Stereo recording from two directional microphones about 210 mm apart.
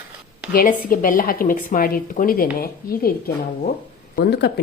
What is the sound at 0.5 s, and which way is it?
A woman's voice, 40° left (ahead or behind).